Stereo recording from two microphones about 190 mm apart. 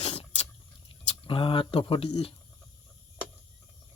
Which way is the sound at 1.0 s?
30° left (ahead or behind).